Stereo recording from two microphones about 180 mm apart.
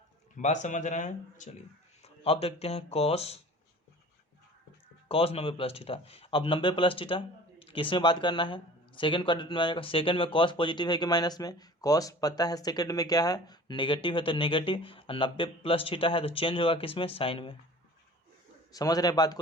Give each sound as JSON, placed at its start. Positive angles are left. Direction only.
{"t": 0.3, "sound": "speech", "side_deg": 40}
{"t": 5.0, "sound": "speech", "side_deg": 30}
{"t": 18.7, "sound": "speech", "side_deg": 20}